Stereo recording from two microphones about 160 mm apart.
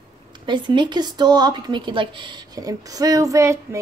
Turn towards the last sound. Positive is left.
turn(degrees=-20)  # may be behind; listen again after turning